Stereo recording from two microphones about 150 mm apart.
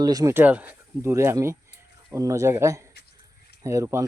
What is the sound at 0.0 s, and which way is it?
Speech, 25° right (ahead or behind).